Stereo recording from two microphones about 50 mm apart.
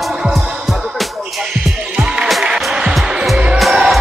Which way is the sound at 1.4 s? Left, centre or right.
Centre.